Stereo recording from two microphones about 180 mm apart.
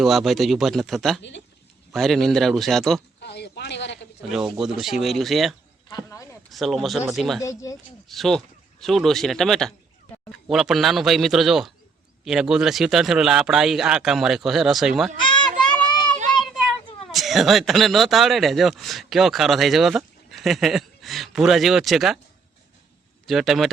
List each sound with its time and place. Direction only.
0.0 s speech: centre (ahead or behind)
3.2 s a sound: 65° left (ahead or behind)
4.2 s speech: 5° right (ahead or behind)
5.9 s speech: 20° left (ahead or behind)
6.5 s speech: centre (ahead or behind)
7.4 s speech: 20° left (ahead or behind)
8.0 s speech: centre (ahead or behind)
15.9 s a sound: 25° left (ahead or behind)
17.1 s speech: centre (ahead or behind)
23.2 s speech: centre (ahead or behind)